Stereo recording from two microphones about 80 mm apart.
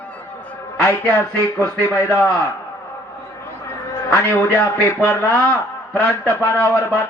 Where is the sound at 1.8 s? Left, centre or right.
Left.